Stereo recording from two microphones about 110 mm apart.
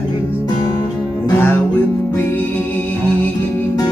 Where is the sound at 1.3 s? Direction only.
20° left (ahead or behind).